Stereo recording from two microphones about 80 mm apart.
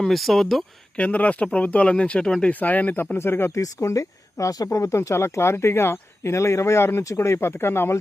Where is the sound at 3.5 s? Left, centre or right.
Left.